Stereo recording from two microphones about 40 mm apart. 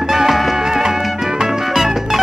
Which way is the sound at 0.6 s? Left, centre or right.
Centre.